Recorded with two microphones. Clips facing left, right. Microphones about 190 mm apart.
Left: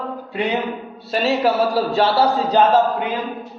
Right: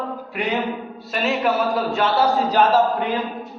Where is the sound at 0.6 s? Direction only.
Centre (ahead or behind).